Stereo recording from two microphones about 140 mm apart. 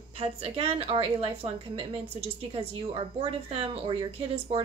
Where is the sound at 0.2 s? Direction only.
45° right (ahead or behind).